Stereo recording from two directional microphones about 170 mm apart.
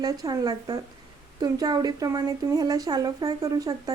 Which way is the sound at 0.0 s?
20° right (ahead or behind).